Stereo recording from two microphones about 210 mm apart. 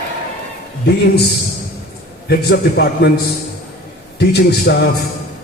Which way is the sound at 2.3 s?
50° left (ahead or behind).